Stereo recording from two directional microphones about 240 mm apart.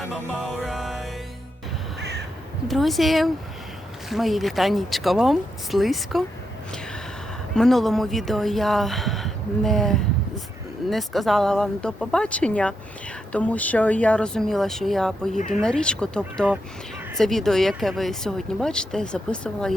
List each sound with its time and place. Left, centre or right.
0.1 s music: centre
2.0 s crow: right
2.6 s speech: centre
7.5 s speech: centre